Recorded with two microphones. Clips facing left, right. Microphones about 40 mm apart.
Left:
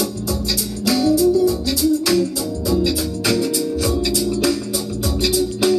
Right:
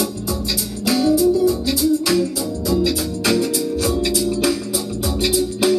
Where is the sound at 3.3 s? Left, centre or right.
Centre.